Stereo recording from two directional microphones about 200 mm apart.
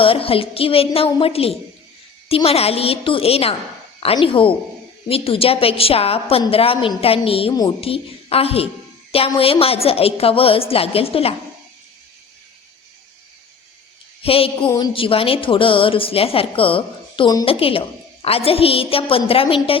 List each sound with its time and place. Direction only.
0.0 s a woman's voice: 25° left (ahead or behind)
14.2 s a woman's voice: 30° left (ahead or behind)